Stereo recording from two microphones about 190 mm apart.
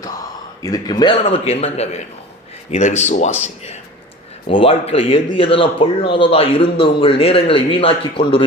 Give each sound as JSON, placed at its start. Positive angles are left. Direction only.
{"t": 0.6, "sound": "a man's voice", "side_deg": 20}